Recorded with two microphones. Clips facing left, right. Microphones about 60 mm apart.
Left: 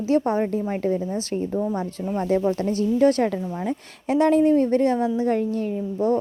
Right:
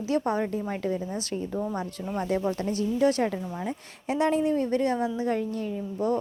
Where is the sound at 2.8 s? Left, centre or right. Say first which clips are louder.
Left 5 dB; left.